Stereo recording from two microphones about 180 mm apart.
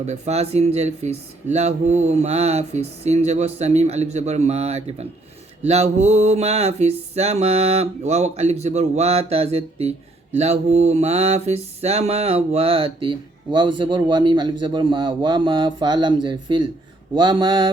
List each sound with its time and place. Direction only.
0.0 s speech: 40° right (ahead or behind)
10.3 s mantra: 35° right (ahead or behind)